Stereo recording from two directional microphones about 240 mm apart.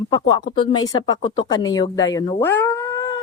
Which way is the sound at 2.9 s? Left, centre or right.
Left.